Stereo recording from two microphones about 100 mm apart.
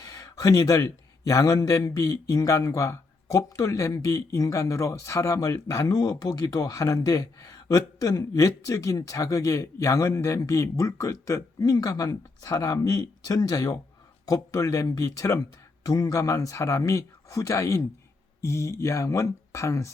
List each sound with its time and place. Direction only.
0.0 s a man's voice: 35° left (ahead or behind)